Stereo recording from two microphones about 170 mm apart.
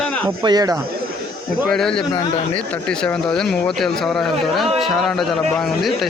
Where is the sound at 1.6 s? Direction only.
5° left (ahead or behind).